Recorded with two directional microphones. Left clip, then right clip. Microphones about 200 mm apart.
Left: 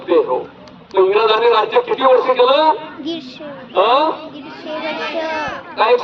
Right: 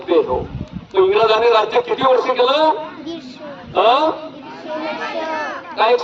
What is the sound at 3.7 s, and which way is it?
Speech, 5° right (ahead or behind).